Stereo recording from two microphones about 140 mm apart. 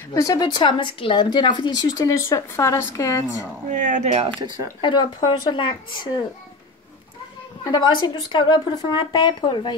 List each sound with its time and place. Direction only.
0.1 s speech: 25° left (ahead or behind)
3.7 s speech: 60° right (ahead or behind)
4.8 s speech: 35° left (ahead or behind)
7.6 s speech: 30° left (ahead or behind)